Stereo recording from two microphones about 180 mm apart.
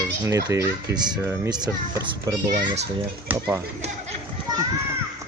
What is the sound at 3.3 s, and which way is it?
Speech, 10° right (ahead or behind).